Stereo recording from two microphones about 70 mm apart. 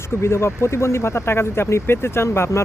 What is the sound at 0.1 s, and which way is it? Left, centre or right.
Speech, left.